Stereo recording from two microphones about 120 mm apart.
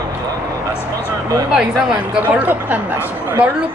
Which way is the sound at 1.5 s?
5° right (ahead or behind).